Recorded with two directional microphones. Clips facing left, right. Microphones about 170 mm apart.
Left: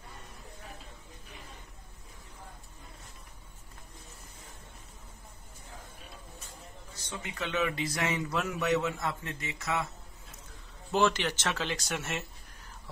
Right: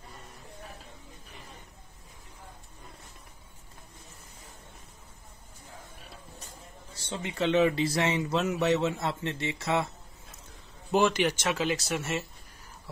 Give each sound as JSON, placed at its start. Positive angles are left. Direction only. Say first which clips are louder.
{"t": 7.1, "sound": "speech", "louder": "right 9 dB", "side_deg": -30}
{"t": 10.9, "sound": "speech", "louder": "right 3 dB", "side_deg": -15}